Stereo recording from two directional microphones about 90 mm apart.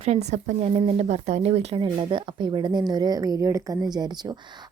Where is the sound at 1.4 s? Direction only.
75° right (ahead or behind).